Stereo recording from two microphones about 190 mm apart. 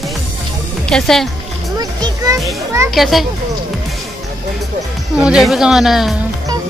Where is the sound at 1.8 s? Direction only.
20° right (ahead or behind).